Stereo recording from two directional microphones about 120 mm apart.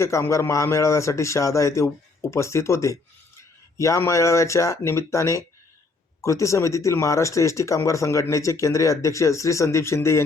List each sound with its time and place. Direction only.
0.0 s speech: 25° left (ahead or behind)